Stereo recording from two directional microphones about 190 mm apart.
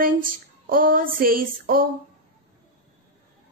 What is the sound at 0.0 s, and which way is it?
Female singing, 50° right (ahead or behind).